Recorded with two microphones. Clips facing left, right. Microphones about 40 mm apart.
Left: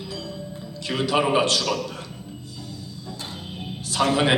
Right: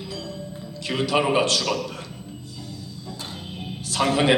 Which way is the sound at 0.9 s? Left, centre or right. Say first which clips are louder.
Even; centre.